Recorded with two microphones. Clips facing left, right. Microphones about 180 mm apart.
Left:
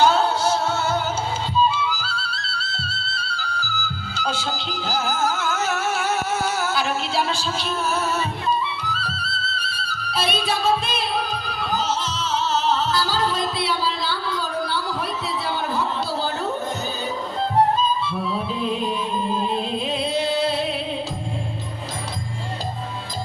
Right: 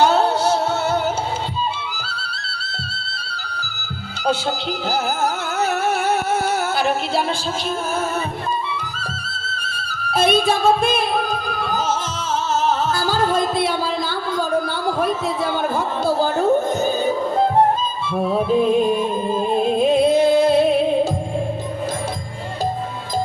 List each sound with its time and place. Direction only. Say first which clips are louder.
0.0 s music: right 2 dB; 60° right (ahead or behind)
1.6 s music: left 4 dB; 60° right (ahead or behind)
4.9 s music: right 2 dB; 60° right (ahead or behind)
8.4 s music: left 1 dB; 50° right (ahead or behind)